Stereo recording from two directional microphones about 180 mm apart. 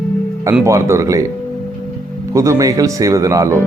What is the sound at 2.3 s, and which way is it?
Speech, 20° right (ahead or behind).